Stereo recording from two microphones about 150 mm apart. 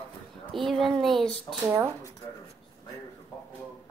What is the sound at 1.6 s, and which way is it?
Child singing, 15° right (ahead or behind).